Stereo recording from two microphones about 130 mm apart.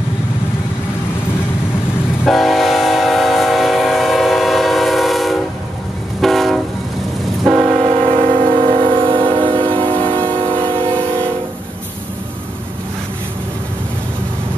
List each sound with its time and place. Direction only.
2.2 s train: centre (ahead or behind)
7.7 s train: 50° right (ahead or behind)